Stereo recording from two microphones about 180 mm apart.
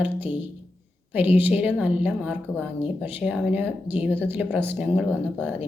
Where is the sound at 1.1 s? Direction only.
10° right (ahead or behind).